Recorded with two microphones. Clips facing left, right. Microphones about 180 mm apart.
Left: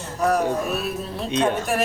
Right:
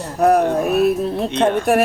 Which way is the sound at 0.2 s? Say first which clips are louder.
Right 6 dB; 60° right (ahead or behind).